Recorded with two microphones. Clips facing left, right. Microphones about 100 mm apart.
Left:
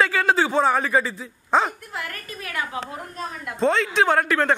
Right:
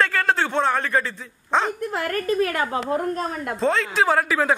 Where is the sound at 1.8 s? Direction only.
45° right (ahead or behind).